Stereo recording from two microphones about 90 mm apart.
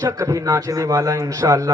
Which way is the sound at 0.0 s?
35° right (ahead or behind).